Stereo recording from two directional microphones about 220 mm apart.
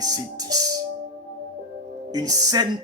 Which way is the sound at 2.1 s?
15° right (ahead or behind).